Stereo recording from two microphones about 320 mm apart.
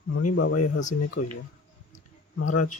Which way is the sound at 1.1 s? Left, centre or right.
Left.